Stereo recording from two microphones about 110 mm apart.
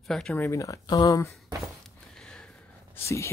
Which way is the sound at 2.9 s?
25° left (ahead or behind).